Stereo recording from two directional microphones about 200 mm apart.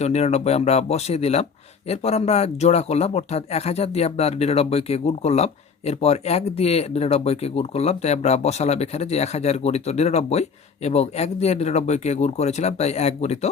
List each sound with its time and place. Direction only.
0.0 s speech: 30° left (ahead or behind)